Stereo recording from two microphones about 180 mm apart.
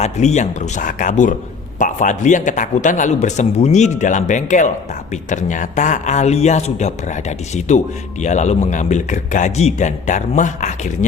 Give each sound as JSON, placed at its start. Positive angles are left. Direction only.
{"t": 0.0, "sound": "a man's voice", "side_deg": 40}